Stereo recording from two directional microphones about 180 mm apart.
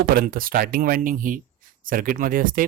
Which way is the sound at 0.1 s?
55° right (ahead or behind).